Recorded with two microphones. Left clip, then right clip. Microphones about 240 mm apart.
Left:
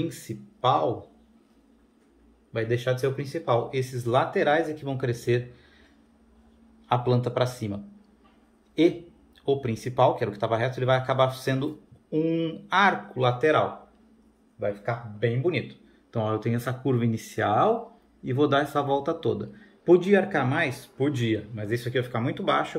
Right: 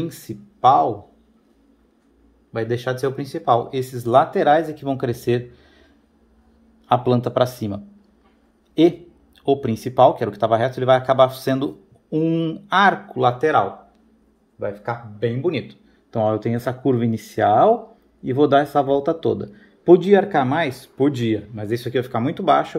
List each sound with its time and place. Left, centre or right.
0.0 s a man's voice: right
2.5 s a man's voice: right
6.9 s a man's voice: right
9.5 s a man's voice: right